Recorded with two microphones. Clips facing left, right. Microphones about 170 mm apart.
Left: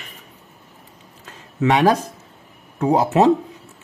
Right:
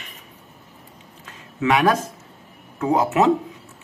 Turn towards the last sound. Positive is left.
turn(degrees=35)  # may be behind; listen again after turning